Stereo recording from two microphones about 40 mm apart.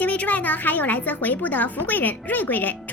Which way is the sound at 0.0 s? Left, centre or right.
Left.